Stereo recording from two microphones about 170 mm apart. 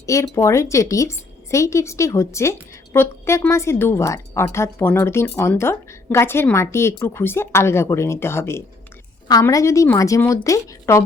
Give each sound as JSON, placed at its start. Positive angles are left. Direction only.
{"t": 0.0, "sound": "a woman's voice", "side_deg": 15}